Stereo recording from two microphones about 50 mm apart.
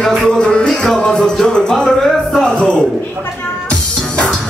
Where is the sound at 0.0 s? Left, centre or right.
Centre.